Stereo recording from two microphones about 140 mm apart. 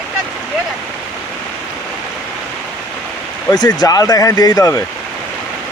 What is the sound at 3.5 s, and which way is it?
Speech, 30° left (ahead or behind).